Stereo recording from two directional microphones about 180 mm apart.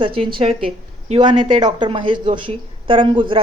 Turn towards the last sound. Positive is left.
turn(degrees=-30)  # may be behind; listen again after turning